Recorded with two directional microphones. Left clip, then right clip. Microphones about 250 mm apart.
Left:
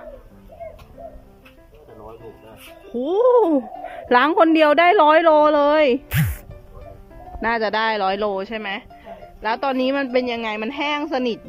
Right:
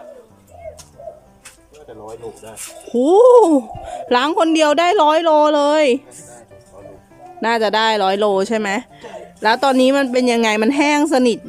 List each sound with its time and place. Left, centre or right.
2.9 s speech: centre
7.4 s speech: centre